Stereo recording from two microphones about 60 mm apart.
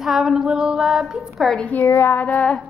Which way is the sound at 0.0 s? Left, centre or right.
Centre.